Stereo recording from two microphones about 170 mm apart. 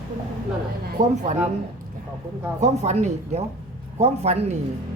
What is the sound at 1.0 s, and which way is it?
Speech, 45° right (ahead or behind).